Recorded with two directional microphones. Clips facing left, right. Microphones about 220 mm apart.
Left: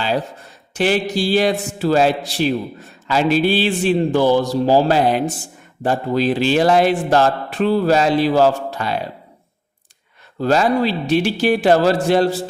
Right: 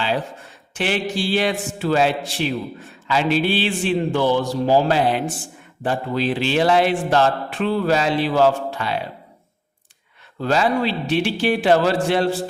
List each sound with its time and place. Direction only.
0.7 s a man's voice: 40° left (ahead or behind)
10.4 s a man's voice: 40° left (ahead or behind)